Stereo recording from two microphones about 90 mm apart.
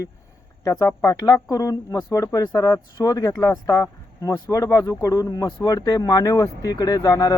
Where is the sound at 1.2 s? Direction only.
40° left (ahead or behind).